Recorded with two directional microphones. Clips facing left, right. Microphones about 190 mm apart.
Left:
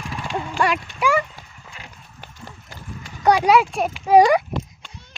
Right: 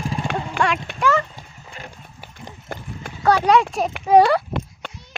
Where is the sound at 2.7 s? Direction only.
55° right (ahead or behind).